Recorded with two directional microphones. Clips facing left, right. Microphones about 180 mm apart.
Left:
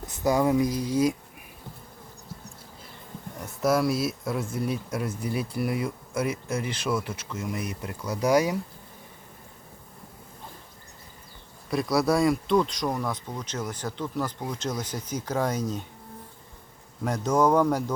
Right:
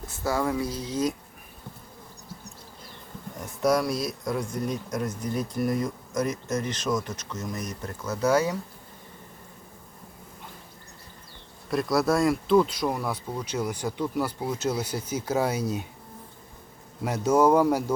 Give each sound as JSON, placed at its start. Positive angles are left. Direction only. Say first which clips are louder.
{"t": 0.0, "sound": "speech", "louder": "left 4 dB", "side_deg": 20}
{"t": 3.4, "sound": "speech", "louder": "even", "side_deg": 0}
{"t": 11.7, "sound": "speech", "louder": "even", "side_deg": 0}
{"t": 17.0, "sound": "speech", "louder": "right 2 dB", "side_deg": -10}